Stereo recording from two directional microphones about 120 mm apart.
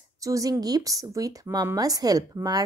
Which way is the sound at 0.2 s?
30° right (ahead or behind).